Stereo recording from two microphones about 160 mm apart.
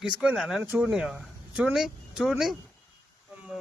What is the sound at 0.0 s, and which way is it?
Speech, 5° right (ahead or behind).